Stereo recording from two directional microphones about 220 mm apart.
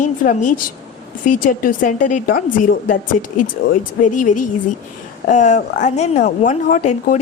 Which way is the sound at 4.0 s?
35° left (ahead or behind).